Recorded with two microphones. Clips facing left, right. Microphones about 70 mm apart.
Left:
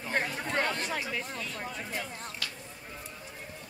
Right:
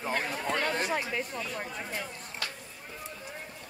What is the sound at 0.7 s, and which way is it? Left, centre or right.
Speech, centre.